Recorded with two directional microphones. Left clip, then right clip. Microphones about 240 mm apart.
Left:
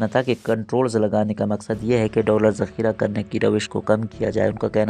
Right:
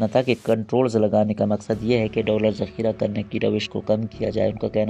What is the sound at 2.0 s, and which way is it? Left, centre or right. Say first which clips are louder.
Speech: left 3 dB; left.